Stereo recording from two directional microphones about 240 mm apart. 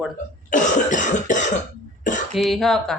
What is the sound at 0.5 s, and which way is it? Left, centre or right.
Cough, left.